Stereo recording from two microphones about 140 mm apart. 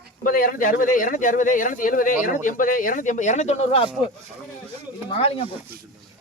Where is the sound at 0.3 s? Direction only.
85° left; by 3.8 s 45° left (ahead or behind).